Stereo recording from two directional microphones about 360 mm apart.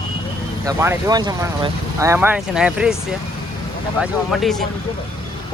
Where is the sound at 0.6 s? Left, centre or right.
Centre.